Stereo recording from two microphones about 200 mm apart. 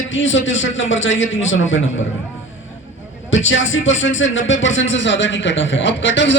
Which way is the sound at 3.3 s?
70° left (ahead or behind).